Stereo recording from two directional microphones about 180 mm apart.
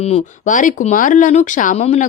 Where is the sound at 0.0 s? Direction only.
40° left (ahead or behind).